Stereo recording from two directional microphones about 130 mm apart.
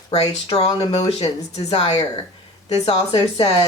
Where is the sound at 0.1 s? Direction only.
55° left (ahead or behind).